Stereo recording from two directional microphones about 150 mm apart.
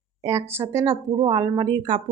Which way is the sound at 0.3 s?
20° right (ahead or behind).